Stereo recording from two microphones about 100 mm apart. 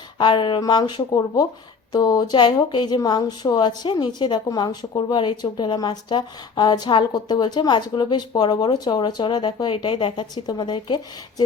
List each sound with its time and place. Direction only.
0.2 s speech: 50° left (ahead or behind)
0.6 s speech: 40° left (ahead or behind)